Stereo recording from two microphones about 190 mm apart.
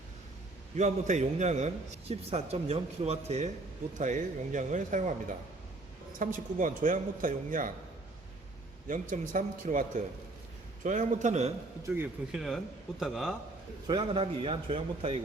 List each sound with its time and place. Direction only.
0.8 s a man's voice: 40° right (ahead or behind)
6.1 s a man's voice: 45° right (ahead or behind)
8.9 s a man's voice: 45° right (ahead or behind)
11.9 s speech: 10° right (ahead or behind)
13.0 s a man's voice: centre (ahead or behind)
13.8 s a man's voice: 25° right (ahead or behind)